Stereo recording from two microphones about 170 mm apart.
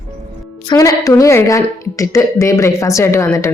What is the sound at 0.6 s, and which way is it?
A woman's voice, 20° left (ahead or behind).